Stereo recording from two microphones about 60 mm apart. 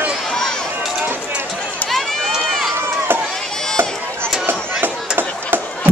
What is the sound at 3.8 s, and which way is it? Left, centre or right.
Chop, right.